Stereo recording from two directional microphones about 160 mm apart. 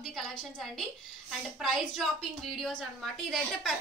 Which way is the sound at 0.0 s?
Centre (ahead or behind).